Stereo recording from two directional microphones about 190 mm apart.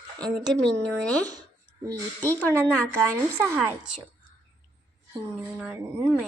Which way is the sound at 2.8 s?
5° left (ahead or behind).